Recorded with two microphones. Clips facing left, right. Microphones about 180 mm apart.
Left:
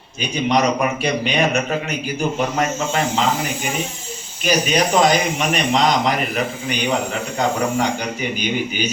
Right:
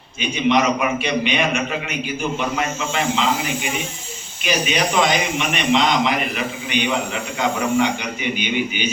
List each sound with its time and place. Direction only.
0.2 s a man's voice: 40° left (ahead or behind)